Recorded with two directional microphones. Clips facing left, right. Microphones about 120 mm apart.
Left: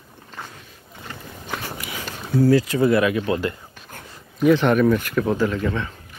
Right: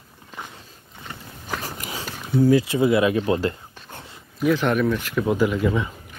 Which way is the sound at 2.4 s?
20° right (ahead or behind).